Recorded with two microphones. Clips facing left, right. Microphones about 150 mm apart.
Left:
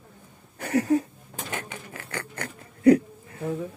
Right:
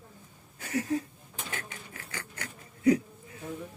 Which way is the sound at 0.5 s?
65° left (ahead or behind).